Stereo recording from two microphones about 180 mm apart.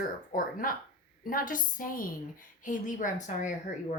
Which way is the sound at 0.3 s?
50° left (ahead or behind).